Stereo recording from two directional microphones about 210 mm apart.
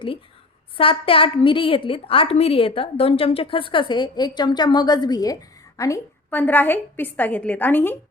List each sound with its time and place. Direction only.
0.8 s a woman's voice: 25° left (ahead or behind); by 7.9 s 10° left (ahead or behind)